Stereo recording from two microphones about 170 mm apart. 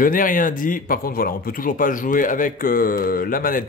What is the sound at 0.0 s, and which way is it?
Speech, 55° left (ahead or behind).